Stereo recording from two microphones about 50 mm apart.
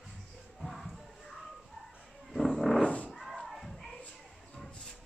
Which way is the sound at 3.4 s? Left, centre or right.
Centre.